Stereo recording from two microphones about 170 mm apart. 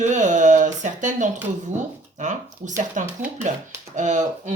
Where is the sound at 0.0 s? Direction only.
45° right (ahead or behind).